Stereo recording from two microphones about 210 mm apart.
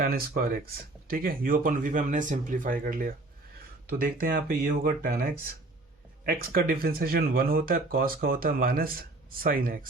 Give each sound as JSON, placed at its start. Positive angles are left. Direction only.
{"t": 0.0, "sound": "speech", "side_deg": -45}